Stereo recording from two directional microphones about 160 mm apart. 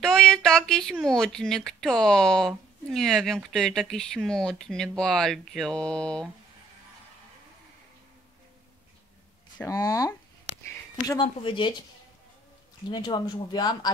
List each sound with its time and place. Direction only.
0.0 s speech: 5° left (ahead or behind)
9.7 s speech: 20° left (ahead or behind)
11.1 s speech: 30° left (ahead or behind)
12.9 s speech: 25° left (ahead or behind)